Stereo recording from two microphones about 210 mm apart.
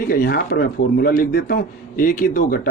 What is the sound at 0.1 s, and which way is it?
A man's voice, 45° left (ahead or behind).